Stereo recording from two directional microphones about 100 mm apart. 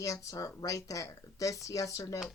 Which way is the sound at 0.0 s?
35° left (ahead or behind).